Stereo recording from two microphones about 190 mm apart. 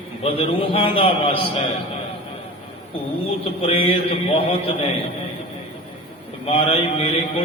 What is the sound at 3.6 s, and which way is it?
Mantra, 30° left (ahead or behind).